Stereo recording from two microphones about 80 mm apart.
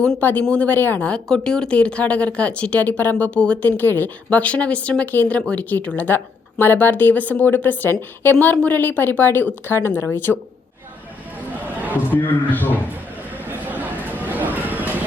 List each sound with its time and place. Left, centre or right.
0.2 s speech: left
12.1 s speech: left
13.3 s chatter: right
14.3 s a sound: right